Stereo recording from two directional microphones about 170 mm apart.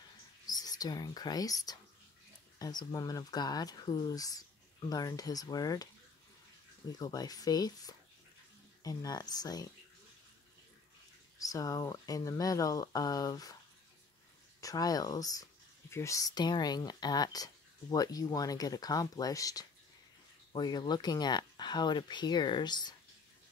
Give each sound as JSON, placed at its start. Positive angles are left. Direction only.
{"t": 0.5, "sound": "speech", "side_deg": 20}
{"t": 7.0, "sound": "speech", "side_deg": 20}
{"t": 11.3, "sound": "speech", "side_deg": 20}
{"t": 14.6, "sound": "speech", "side_deg": 20}